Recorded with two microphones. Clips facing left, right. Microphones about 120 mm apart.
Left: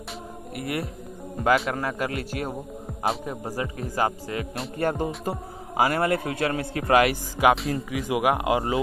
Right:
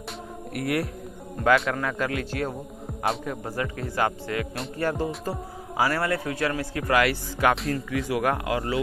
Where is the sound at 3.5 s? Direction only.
25° left (ahead or behind).